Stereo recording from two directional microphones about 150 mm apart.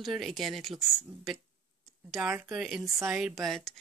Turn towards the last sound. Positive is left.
turn(degrees=0)  # may be behind; listen again after turning